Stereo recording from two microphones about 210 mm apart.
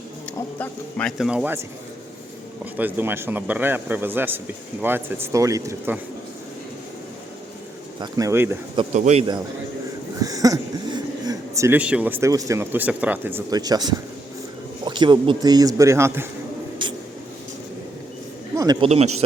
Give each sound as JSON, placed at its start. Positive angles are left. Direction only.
{"t": 0.6, "sound": "speech", "side_deg": 5}
{"t": 2.7, "sound": "a man's voice", "side_deg": -10}
{"t": 8.0, "sound": "a man's voice", "side_deg": -15}
{"t": 8.7, "sound": "speech", "side_deg": -30}
{"t": 10.2, "sound": "a man's voice", "side_deg": -15}
{"t": 16.8, "sound": "vehicle", "side_deg": -25}
{"t": 18.5, "sound": "a sound", "side_deg": -20}
{"t": 18.9, "sound": "speech", "side_deg": -30}